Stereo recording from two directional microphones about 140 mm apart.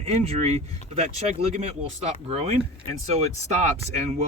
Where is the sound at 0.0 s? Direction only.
45° right (ahead or behind).